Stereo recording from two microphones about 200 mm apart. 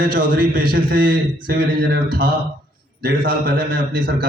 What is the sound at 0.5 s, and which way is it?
A man's voice, 45° right (ahead or behind).